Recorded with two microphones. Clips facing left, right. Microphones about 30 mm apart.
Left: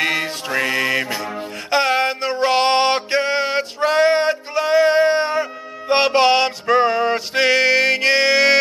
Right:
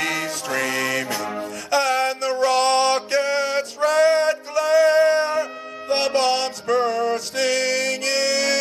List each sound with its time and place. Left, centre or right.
0.0 s music: left
1.4 s music: left